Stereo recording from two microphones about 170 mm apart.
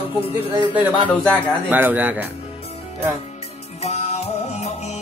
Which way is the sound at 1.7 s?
10° right (ahead or behind).